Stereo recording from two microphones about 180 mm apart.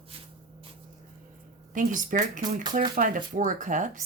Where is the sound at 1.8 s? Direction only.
45° right (ahead or behind).